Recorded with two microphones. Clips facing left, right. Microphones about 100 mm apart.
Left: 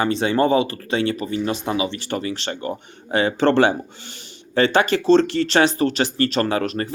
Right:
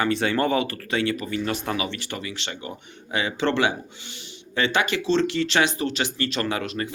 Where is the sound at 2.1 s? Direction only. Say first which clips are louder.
Left 8 dB; 40° left (ahead or behind).